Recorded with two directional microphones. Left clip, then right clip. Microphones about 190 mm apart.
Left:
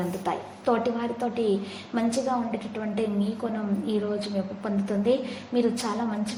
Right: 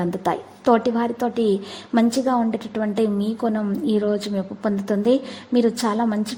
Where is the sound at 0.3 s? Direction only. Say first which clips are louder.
Right 8 dB; 40° right (ahead or behind).